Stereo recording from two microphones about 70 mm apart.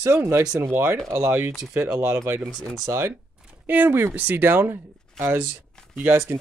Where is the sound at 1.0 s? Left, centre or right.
Right.